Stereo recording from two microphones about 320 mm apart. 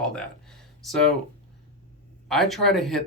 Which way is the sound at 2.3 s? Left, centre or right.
Centre.